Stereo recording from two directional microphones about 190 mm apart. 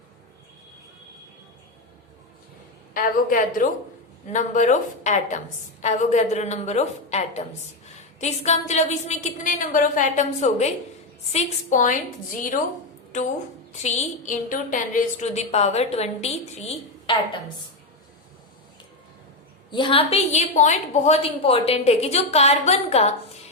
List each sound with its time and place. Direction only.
2.9 s a woman's voice: 45° left (ahead or behind)
13.8 s a woman's voice: 35° left (ahead or behind)
19.7 s a woman's voice: 25° left (ahead or behind)